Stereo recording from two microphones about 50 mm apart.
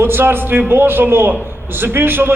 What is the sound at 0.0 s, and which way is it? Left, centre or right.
A man's voice, right.